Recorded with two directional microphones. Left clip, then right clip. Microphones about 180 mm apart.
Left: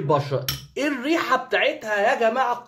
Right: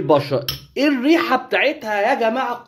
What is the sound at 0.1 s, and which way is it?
Speech, 30° right (ahead or behind).